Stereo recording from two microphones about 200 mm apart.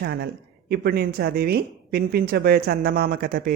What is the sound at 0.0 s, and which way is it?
A man's voice, 55° right (ahead or behind).